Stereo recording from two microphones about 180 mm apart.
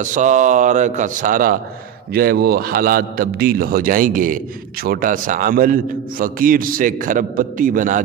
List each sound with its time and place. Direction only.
0.0 s a man's voice: 45° right (ahead or behind)